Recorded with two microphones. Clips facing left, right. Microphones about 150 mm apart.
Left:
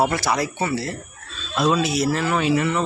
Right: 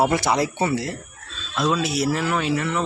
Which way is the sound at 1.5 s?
5° left (ahead or behind).